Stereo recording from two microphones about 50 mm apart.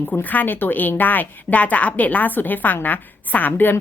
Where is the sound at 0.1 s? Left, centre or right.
Left.